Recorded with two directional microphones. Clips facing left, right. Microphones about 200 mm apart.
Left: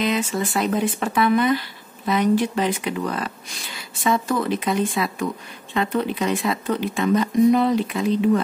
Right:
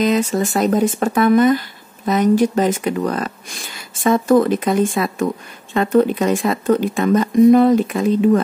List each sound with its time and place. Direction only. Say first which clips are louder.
0.0 s speech: right 6 dB; 40° right (ahead or behind)